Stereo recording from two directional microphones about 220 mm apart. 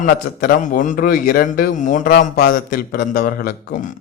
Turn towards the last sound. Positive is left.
turn(degrees=40)  # may be behind; listen again after turning